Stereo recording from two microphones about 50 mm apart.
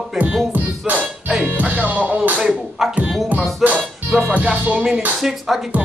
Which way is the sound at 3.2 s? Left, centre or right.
Right.